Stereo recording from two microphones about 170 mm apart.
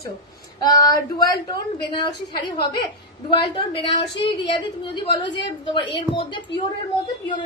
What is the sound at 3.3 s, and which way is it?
A woman's voice, 30° left (ahead or behind).